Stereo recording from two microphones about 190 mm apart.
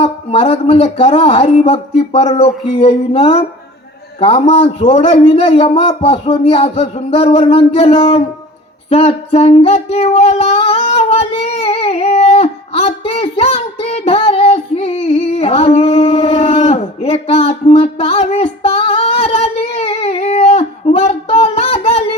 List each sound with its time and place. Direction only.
0.0 s a man's voice: 30° left (ahead or behind)
8.9 s child singing: 30° left (ahead or behind)